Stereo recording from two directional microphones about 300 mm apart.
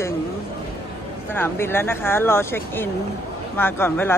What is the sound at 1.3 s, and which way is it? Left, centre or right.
Speech, centre.